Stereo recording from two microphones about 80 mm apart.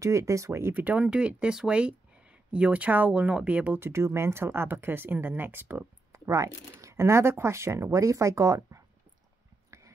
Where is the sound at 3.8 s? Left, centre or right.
Right.